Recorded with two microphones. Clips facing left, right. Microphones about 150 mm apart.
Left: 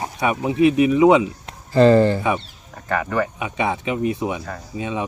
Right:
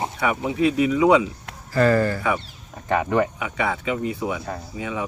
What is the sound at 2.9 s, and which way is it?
Speech, 20° right (ahead or behind).